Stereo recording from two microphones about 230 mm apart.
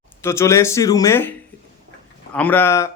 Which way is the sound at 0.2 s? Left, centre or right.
Centre.